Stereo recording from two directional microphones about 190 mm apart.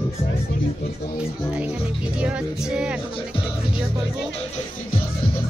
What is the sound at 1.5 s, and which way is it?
Speech, 5° right (ahead or behind).